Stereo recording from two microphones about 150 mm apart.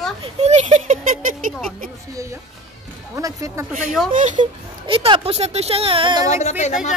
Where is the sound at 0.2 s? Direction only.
45° right (ahead or behind).